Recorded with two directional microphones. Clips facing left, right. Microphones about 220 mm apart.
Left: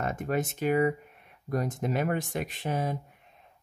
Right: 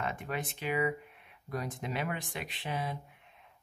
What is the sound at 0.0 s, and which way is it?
Speech, 45° left (ahead or behind).